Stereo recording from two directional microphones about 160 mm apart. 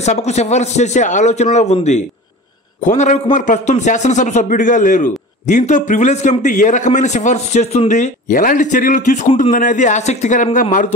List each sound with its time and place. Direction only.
0.0 s a man's voice: 45° left (ahead or behind)